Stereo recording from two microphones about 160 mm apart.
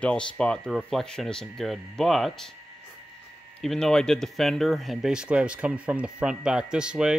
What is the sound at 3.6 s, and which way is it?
Speech, 5° left (ahead or behind).